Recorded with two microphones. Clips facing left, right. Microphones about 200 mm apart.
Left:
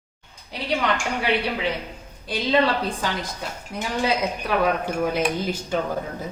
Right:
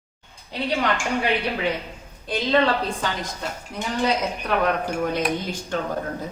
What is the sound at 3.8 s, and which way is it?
A woman's voice, 5° left (ahead or behind).